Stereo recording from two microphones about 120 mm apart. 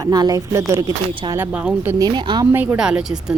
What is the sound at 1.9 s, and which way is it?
Speech, 35° right (ahead or behind).